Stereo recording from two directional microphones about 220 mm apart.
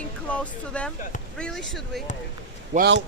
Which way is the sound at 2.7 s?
30° right (ahead or behind).